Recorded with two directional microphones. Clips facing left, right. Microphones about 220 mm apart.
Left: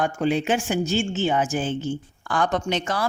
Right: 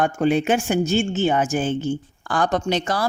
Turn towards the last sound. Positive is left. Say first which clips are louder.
# right 3 dB
turn(degrees=-35)  # may be behind; listen again after turning